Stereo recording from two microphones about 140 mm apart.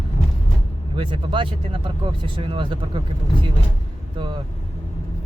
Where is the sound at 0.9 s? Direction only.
35° right (ahead or behind).